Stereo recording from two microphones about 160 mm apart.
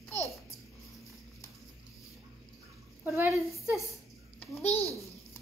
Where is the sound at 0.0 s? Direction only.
40° left (ahead or behind).